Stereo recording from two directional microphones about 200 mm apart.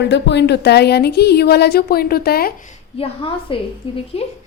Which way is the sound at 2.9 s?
25° left (ahead or behind).